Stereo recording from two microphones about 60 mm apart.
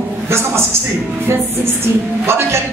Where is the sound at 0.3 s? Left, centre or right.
Right.